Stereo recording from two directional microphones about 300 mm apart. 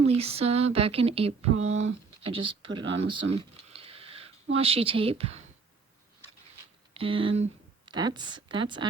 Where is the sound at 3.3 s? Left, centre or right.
Centre.